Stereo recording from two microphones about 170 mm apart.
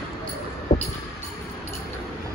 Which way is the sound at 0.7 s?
40° left (ahead or behind).